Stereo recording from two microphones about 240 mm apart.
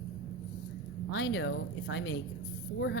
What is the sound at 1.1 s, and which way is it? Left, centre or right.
Speech, left.